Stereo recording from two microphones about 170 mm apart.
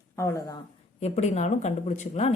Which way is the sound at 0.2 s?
15° left (ahead or behind).